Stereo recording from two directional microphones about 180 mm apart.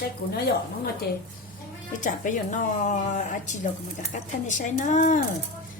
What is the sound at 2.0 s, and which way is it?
Speech, 45° left (ahead or behind).